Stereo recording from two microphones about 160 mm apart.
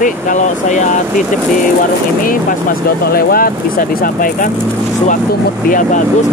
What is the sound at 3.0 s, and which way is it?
Speech, 70° left (ahead or behind).